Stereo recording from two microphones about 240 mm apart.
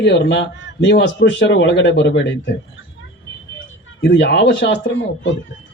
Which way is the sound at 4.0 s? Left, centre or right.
Left.